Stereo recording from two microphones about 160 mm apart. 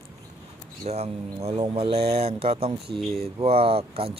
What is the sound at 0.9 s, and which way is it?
Speech, 40° right (ahead or behind).